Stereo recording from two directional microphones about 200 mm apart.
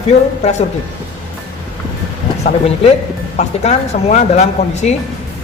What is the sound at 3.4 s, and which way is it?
Speech, 35° left (ahead or behind).